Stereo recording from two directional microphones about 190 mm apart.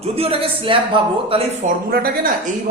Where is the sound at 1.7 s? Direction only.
50° right (ahead or behind).